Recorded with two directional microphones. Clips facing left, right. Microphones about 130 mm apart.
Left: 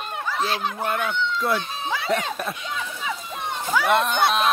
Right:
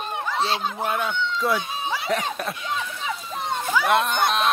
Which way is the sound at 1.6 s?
15° right (ahead or behind).